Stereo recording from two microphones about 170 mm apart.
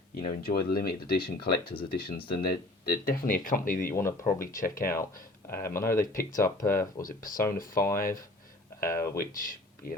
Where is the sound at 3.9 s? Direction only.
15° left (ahead or behind).